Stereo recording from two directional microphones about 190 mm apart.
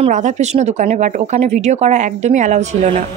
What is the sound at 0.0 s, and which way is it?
Speech, 40° right (ahead or behind).